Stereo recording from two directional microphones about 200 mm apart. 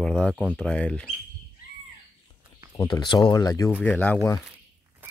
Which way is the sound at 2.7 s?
20° left (ahead or behind).